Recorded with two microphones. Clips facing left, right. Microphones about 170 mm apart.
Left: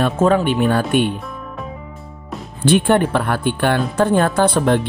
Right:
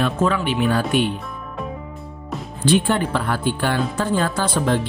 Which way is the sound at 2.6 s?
60° left (ahead or behind).